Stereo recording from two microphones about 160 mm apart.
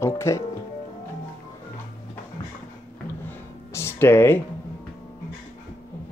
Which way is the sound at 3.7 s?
15° left (ahead or behind).